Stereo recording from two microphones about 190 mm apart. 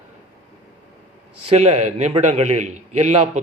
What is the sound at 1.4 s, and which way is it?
A man's voice, 35° right (ahead or behind).